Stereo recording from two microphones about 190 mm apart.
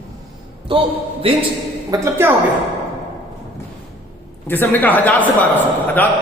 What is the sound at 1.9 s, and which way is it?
Speech, 15° right (ahead or behind).